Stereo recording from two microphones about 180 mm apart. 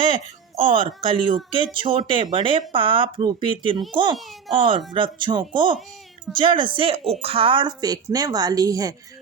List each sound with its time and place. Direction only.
0.0 s a woman's voice: 30° right (ahead or behind)